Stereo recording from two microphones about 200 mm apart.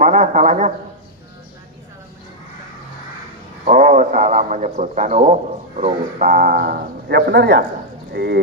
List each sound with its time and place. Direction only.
0.0 s a man's voice: 40° right (ahead or behind)
3.7 s a man's voice: 40° right (ahead or behind)